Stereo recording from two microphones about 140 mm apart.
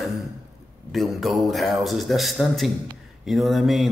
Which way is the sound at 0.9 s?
Centre (ahead or behind).